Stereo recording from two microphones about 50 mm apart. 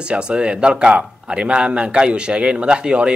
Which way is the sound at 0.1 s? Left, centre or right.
Right.